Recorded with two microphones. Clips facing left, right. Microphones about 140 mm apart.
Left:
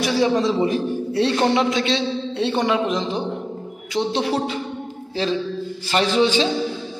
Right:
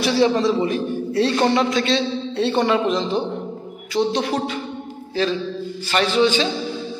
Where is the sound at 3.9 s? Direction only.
25° left (ahead or behind).